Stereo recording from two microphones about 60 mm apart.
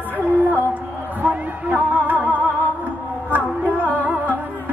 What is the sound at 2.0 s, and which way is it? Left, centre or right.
Music, right.